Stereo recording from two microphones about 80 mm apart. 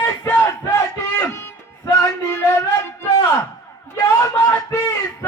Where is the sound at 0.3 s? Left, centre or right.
Left.